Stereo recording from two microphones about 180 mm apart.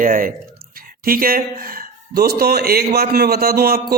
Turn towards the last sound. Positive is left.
turn(degrees=-60)  # may be behind; listen again after turning